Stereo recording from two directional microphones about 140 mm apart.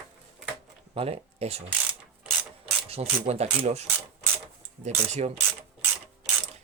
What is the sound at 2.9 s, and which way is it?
Speech, 50° right (ahead or behind).